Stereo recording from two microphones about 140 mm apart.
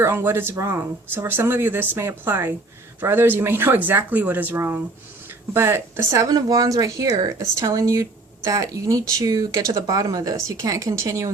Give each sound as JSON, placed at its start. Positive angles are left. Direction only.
{"t": 0.0, "sound": "speech", "side_deg": -20}